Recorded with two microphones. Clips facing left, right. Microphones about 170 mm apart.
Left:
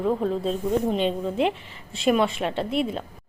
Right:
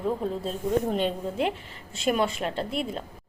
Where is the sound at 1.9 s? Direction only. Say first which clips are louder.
Left 4 dB; 25° left (ahead or behind).